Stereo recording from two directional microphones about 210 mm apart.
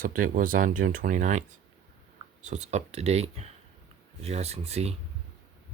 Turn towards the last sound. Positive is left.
turn(degrees=-30)  # may be behind; listen again after turning